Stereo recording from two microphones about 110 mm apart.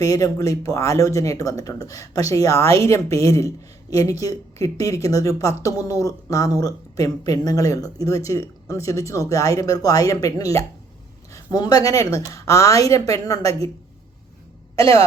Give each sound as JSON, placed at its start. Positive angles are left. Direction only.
{"t": 0.0, "sound": "speech", "side_deg": 30}
{"t": 14.8, "sound": "speech", "side_deg": 30}